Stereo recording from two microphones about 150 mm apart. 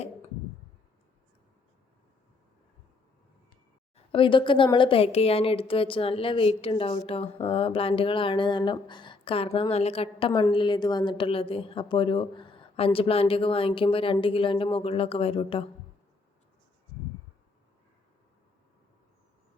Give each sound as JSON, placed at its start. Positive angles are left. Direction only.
{"t": 3.9, "sound": "a woman's voice", "side_deg": 35}